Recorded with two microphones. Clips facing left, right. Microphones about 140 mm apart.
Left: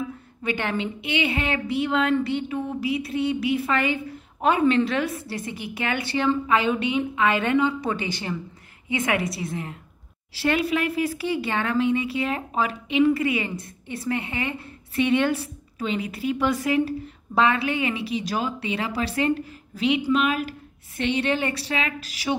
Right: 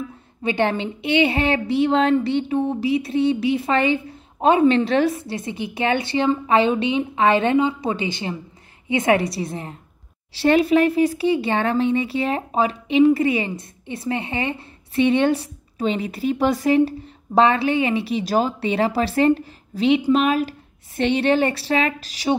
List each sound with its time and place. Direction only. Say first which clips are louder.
0.4 s a woman's voice: right 6 dB; 30° right (ahead or behind)